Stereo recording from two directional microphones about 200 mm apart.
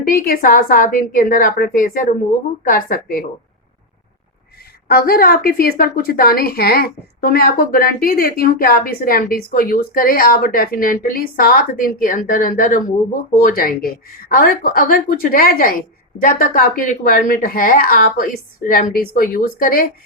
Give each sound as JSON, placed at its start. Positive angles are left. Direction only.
{"t": 0.1, "sound": "a woman's voice", "side_deg": 45}
{"t": 4.9, "sound": "a woman's voice", "side_deg": 50}